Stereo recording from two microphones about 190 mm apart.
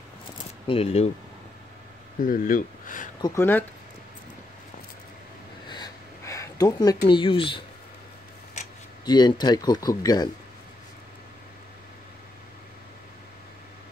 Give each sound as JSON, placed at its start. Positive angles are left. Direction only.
{"t": 0.7, "sound": "speech", "side_deg": 30}
{"t": 2.2, "sound": "speech", "side_deg": 45}
{"t": 3.2, "sound": "speech", "side_deg": 20}
{"t": 5.7, "sound": "a sound", "side_deg": 20}
{"t": 7.1, "sound": "speech", "side_deg": 25}
{"t": 9.0, "sound": "speech", "side_deg": 20}